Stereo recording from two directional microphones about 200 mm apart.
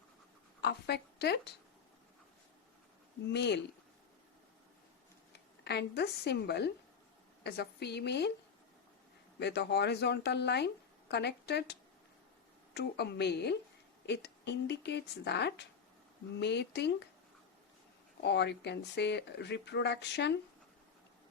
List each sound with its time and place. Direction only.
0.6 s a woman's voice: 55° left (ahead or behind)
3.2 s speech: 60° left (ahead or behind)
5.3 s speech: 55° left (ahead or behind)
9.4 s speech: 55° left (ahead or behind)
18.2 s speech: 55° left (ahead or behind)